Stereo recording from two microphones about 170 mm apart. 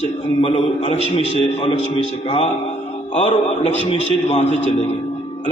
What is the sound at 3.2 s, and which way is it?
A man's voice, 35° left (ahead or behind).